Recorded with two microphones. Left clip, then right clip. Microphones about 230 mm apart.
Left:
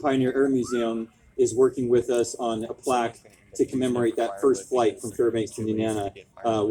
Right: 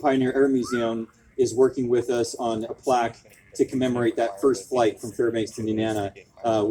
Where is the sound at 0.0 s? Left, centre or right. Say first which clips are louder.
Right 2 dB; right.